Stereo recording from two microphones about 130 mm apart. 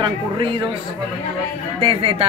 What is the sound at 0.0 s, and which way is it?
Speech, 40° right (ahead or behind).